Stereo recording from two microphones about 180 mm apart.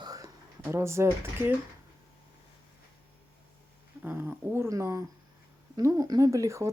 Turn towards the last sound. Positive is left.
turn(degrees=-15)  # may be behind; listen again after turning